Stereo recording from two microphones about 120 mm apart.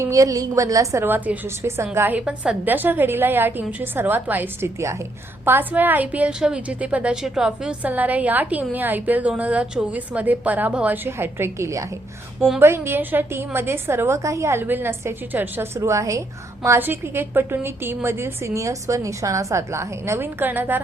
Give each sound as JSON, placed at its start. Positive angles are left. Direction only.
{"t": 0.0, "sound": "a woman's voice", "side_deg": -30}